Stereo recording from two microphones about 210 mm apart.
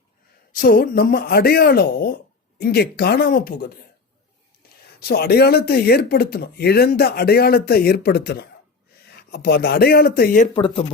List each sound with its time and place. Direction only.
0.5 s speech: 45° left (ahead or behind)
4.9 s speech: 50° left (ahead or behind)
10.5 s speech: 25° left (ahead or behind)